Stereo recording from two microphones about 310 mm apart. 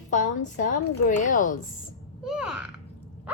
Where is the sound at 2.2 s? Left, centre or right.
Centre.